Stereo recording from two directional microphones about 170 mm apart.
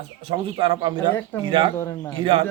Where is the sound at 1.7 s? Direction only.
15° left (ahead or behind).